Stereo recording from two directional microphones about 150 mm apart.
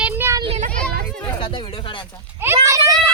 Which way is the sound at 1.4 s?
35° left (ahead or behind).